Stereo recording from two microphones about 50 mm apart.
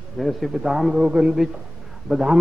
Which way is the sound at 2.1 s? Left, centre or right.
Centre.